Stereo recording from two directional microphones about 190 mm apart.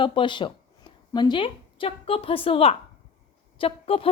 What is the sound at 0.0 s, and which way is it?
A woman's voice, 25° left (ahead or behind).